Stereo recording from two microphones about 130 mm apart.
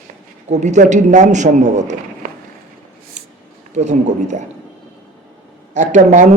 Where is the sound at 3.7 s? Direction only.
65° right (ahead or behind).